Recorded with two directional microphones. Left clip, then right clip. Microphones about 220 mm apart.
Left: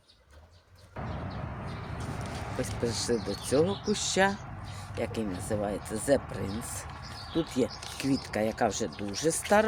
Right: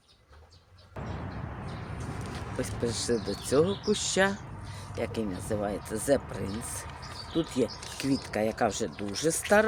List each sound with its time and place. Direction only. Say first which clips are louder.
2.6 s speech: even; 5° right (ahead or behind)